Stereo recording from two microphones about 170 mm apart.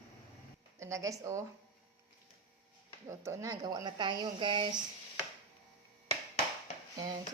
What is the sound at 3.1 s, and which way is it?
A woman's voice, 15° right (ahead or behind).